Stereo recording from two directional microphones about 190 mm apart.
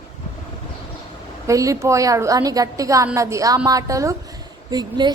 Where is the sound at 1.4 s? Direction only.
15° right (ahead or behind).